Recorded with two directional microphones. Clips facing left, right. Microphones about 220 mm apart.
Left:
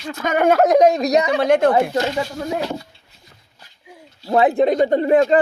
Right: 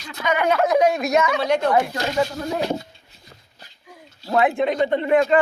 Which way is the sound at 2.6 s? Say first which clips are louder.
Right 4 dB; 20° right (ahead or behind).